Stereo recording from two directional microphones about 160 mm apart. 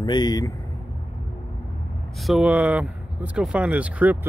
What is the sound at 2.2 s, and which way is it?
Speech, 5° right (ahead or behind).